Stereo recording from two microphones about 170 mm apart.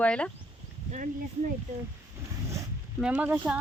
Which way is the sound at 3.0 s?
10° right (ahead or behind).